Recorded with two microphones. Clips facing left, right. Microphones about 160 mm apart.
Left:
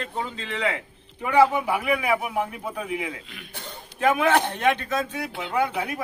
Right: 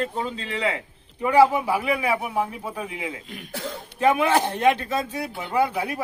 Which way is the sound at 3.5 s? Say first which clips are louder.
Right 9 dB; 90° right.